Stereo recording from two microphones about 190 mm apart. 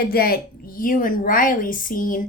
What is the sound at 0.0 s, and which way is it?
A woman's voice, 50° left (ahead or behind).